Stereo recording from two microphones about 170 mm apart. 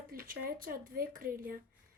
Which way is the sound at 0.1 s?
60° right (ahead or behind).